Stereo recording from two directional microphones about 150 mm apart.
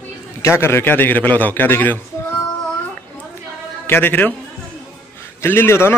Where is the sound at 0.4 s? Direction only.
15° left (ahead or behind).